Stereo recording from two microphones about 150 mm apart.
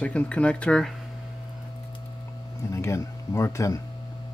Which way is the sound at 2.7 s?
20° left (ahead or behind).